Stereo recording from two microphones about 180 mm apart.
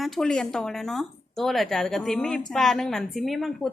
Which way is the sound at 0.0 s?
Centre (ahead or behind).